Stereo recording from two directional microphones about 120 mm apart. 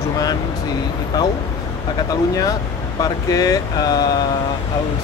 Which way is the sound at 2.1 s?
30° left (ahead or behind).